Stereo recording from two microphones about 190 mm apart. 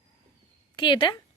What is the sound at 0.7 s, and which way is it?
Speech, 25° left (ahead or behind).